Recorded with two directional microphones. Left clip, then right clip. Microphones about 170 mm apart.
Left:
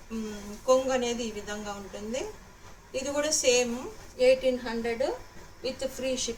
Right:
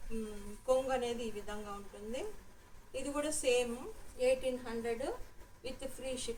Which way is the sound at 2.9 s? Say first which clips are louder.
Left 9 dB; 15° right (ahead or behind).